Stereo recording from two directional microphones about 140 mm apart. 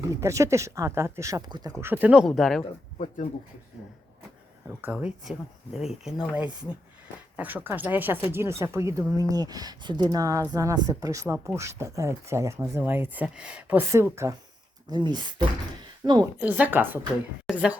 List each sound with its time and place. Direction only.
0.1 s speech: 20° right (ahead or behind)
1.8 s speech: 15° right (ahead or behind)
4.8 s a woman's voice: 10° right (ahead or behind)
14.8 s speech: 30° right (ahead or behind)
16.4 s a woman's voice: 10° right (ahead or behind)
17.4 s a sound: 5° right (ahead or behind)